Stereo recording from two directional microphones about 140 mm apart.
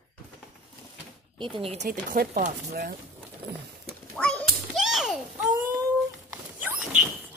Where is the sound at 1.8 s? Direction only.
80° right.